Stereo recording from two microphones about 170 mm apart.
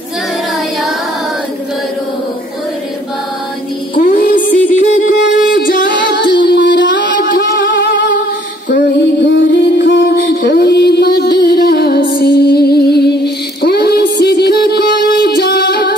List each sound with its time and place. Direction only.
3.9 s music: 55° left (ahead or behind)
5.9 s music: 90° left; by 16.0 s 70° left (ahead or behind)